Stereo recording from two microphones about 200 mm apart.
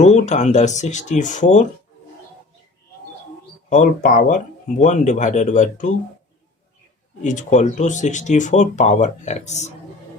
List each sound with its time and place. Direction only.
0.0 s speech: 35° left (ahead or behind)
3.7 s speech: 40° left (ahead or behind)
7.2 s speech: 40° left (ahead or behind)